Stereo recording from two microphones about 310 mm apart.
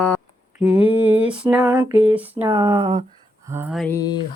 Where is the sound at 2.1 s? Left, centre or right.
Centre.